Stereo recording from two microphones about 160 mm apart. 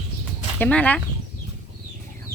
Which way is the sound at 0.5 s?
10° left (ahead or behind).